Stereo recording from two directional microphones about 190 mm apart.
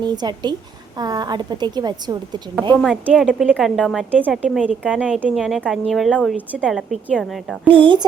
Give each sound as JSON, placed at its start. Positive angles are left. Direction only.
{"t": 0.0, "sound": "a woman's voice", "side_deg": -20}
{"t": 2.7, "sound": "a woman's voice", "side_deg": 0}
{"t": 7.7, "sound": "a woman's voice", "side_deg": -25}